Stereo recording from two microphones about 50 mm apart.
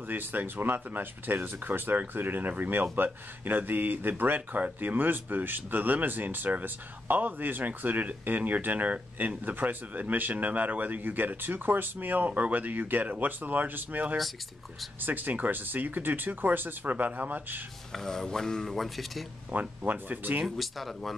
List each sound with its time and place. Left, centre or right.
0.1 s speech: right
17.9 s speech: centre
19.5 s speech: right
20.4 s speech: centre